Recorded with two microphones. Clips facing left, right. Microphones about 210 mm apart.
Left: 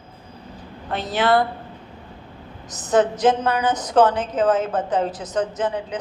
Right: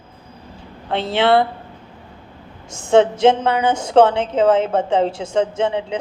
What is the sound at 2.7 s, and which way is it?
A woman's voice, 25° right (ahead or behind).